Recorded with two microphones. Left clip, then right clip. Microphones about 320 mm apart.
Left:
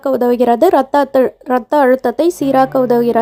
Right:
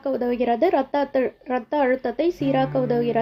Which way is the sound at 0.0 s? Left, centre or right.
Left.